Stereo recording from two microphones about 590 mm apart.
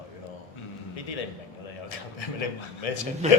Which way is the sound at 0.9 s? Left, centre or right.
Left.